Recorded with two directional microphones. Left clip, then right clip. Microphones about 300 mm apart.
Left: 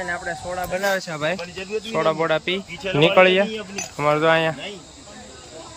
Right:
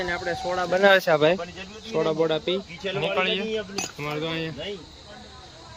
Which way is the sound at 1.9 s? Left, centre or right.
Centre.